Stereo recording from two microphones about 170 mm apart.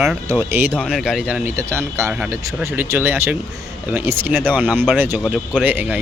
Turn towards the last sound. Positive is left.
turn(degrees=-10)  # may be behind; listen again after turning